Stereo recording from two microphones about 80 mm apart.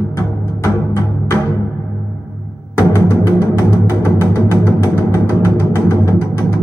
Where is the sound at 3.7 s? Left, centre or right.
Left.